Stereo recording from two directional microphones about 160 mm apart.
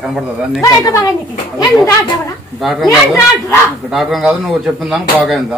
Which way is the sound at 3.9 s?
Centre (ahead or behind).